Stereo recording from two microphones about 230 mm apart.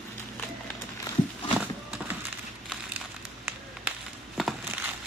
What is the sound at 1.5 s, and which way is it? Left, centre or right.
Horse, centre.